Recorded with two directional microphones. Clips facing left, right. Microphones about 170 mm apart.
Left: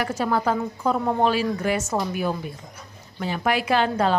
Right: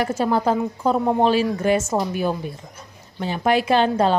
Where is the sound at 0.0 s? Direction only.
25° right (ahead or behind).